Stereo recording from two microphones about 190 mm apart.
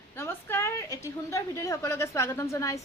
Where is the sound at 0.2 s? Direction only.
10° left (ahead or behind).